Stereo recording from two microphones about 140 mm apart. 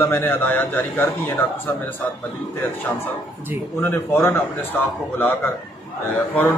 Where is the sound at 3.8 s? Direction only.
15° left (ahead or behind).